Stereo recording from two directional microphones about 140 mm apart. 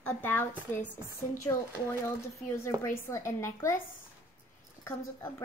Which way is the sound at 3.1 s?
20° left (ahead or behind).